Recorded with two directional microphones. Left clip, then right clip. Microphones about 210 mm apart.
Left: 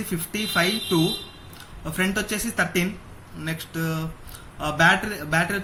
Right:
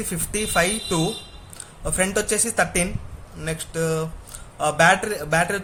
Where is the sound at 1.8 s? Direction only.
60° right (ahead or behind).